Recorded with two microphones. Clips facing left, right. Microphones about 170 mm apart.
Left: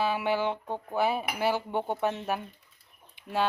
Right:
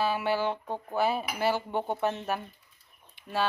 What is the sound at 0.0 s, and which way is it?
Speech, 15° left (ahead or behind).